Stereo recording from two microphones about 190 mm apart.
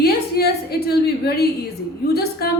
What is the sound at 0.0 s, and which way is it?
A woman's voice, 55° left (ahead or behind).